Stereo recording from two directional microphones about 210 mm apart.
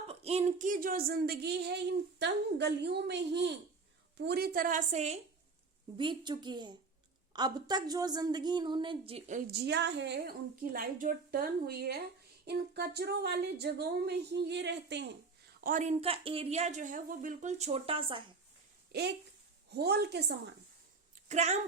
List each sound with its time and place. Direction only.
0.1 s a woman's voice: 30° right (ahead or behind)
6.0 s a woman's voice: 20° right (ahead or behind)
9.5 s speech: 55° right (ahead or behind)
15.6 s a woman's voice: 35° right (ahead or behind)
18.9 s speech: 50° right (ahead or behind)
21.2 s a woman's voice: 30° right (ahead or behind)